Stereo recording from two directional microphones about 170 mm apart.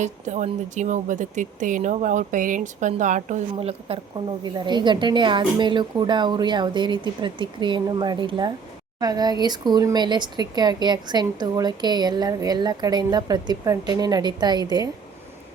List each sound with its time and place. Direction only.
0.0 s speech: 45° right (ahead or behind); by 14.8 s 25° right (ahead or behind)